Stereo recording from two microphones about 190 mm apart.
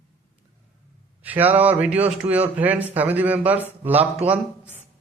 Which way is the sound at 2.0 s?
30° right (ahead or behind).